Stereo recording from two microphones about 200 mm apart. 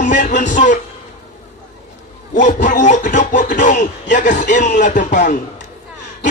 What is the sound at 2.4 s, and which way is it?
Music, 40° left (ahead or behind).